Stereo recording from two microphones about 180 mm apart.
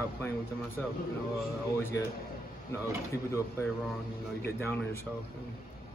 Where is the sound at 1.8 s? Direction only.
10° left (ahead or behind).